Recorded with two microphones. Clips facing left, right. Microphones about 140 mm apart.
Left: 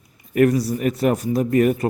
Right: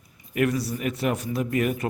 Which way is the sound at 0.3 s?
40° left (ahead or behind).